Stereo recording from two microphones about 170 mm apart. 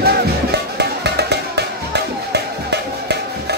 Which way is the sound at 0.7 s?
75° right (ahead or behind).